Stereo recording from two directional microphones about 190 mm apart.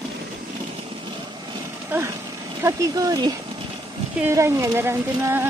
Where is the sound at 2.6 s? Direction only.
15° right (ahead or behind).